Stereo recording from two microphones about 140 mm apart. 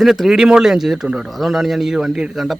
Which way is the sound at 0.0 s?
Centre (ahead or behind).